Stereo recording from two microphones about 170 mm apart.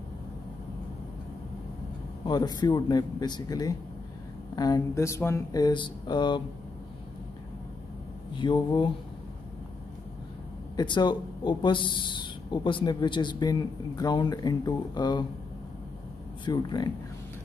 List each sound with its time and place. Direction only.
2.2 s speech: 25° left (ahead or behind)
8.4 s speech: 25° left (ahead or behind)
10.8 s speech: 25° left (ahead or behind)
16.4 s speech: 25° left (ahead or behind)